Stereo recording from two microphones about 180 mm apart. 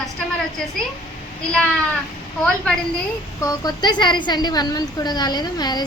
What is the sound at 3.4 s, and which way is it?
A woman's voice, 25° left (ahead or behind).